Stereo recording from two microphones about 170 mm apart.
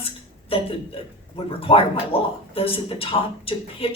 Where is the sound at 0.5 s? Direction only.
35° left (ahead or behind).